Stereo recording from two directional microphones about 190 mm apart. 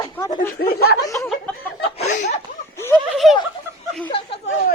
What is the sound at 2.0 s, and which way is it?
Speech, 40° left (ahead or behind).